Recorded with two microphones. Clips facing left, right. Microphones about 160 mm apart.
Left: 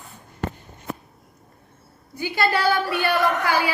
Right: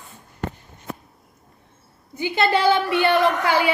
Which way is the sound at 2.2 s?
20° right (ahead or behind).